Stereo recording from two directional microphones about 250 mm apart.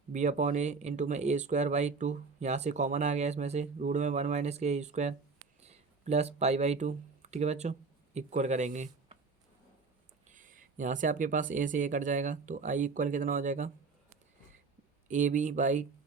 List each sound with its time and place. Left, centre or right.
0.1 s speech: right
10.2 s speech: right
15.0 s speech: right